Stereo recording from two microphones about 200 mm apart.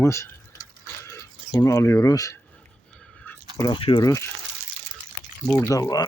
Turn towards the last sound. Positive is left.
turn(degrees=15)  # may be behind; listen again after turning